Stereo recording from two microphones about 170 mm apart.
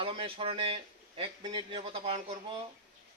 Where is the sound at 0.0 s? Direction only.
30° right (ahead or behind).